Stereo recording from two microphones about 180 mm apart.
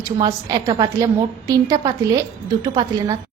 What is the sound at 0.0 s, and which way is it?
A woman's voice, 20° right (ahead or behind).